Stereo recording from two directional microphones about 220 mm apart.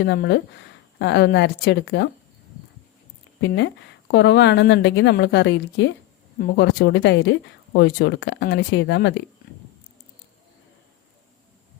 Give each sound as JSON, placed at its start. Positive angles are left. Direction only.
{"t": 0.0, "sound": "speech", "side_deg": 50}
{"t": 3.4, "sound": "speech", "side_deg": 50}